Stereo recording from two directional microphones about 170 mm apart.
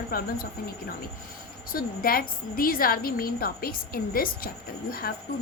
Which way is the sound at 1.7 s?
55° left (ahead or behind).